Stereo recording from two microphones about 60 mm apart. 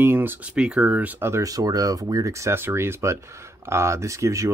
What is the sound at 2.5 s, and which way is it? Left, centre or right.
Speech, right.